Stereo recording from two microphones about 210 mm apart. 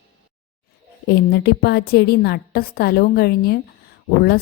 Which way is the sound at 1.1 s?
50° left (ahead or behind).